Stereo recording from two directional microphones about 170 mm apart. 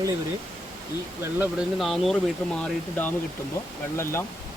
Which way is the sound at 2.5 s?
10° left (ahead or behind).